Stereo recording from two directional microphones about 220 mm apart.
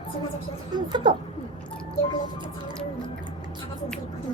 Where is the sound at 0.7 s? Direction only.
20° right (ahead or behind).